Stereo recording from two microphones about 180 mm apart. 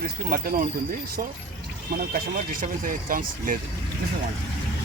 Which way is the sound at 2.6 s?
50° right (ahead or behind).